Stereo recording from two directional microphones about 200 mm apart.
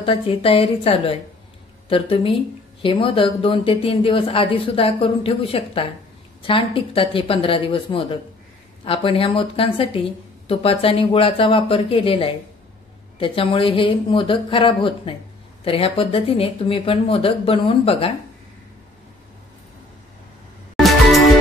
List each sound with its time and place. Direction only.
0.0 s speech: 25° left (ahead or behind)
20.7 s music: centre (ahead or behind)